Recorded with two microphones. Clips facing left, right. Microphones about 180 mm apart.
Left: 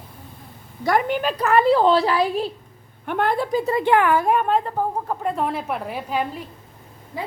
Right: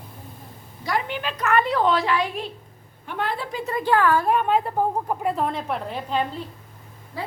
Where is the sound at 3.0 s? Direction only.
55° left (ahead or behind).